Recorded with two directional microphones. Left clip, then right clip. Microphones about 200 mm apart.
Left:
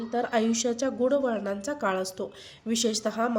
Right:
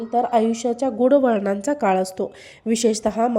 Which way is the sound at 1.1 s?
40° right (ahead or behind).